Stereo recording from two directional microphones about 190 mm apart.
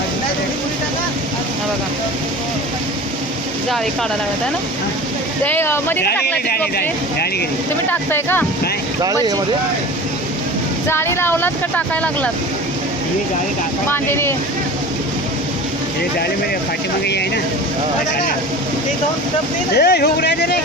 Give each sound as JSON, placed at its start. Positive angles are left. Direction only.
{"t": 5.4, "sound": "speech", "side_deg": 10}
{"t": 6.2, "sound": "speech", "side_deg": 55}
{"t": 7.9, "sound": "speech", "side_deg": 10}
{"t": 10.8, "sound": "speech", "side_deg": 15}
{"t": 13.8, "sound": "speech", "side_deg": 10}
{"t": 17.1, "sound": "speech", "side_deg": 60}
{"t": 19.7, "sound": "speech", "side_deg": 60}